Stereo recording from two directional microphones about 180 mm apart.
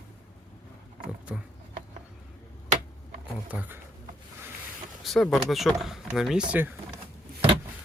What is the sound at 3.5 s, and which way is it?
Speech, 10° right (ahead or behind).